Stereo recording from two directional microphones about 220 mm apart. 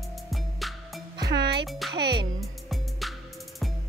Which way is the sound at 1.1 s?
20° right (ahead or behind).